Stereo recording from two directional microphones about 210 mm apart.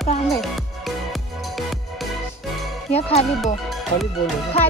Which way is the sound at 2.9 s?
30° left (ahead or behind).